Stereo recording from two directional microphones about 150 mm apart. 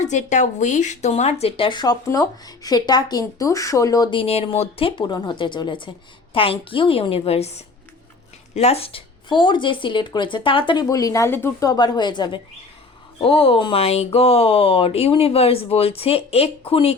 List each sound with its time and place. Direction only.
0.0 s speech: 50° left (ahead or behind)